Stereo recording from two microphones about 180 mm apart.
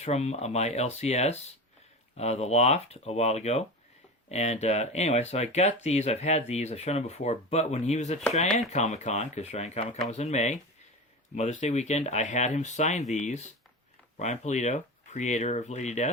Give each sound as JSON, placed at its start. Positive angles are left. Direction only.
{"t": 0.0, "sound": "speech", "side_deg": 35}